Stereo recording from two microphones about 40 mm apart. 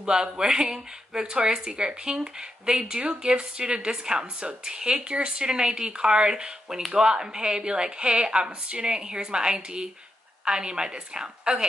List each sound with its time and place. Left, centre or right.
0.0 s a woman's voice: centre